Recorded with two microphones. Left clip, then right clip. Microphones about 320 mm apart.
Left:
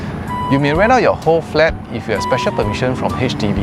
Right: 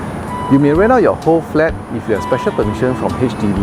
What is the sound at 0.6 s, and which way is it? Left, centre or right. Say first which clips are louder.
Speech: right 1 dB; left.